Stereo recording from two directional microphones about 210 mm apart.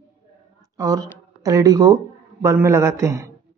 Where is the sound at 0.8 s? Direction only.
15° right (ahead or behind).